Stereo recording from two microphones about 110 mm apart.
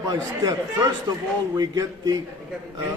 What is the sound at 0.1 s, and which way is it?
A man's voice, 35° right (ahead or behind).